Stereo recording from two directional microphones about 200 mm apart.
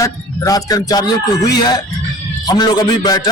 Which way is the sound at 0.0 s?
15° left (ahead or behind).